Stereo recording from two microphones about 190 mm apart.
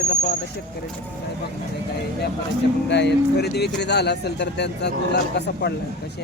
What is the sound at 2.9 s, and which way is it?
Speech, 65° left (ahead or behind).